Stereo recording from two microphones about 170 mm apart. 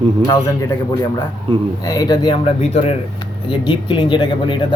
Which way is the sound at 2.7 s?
35° left (ahead or behind).